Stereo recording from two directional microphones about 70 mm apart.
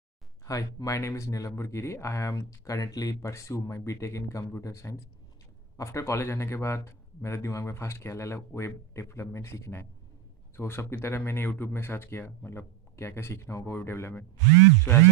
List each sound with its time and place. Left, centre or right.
0.5 s speech: left